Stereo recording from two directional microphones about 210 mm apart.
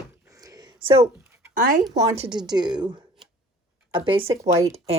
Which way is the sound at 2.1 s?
25° right (ahead or behind).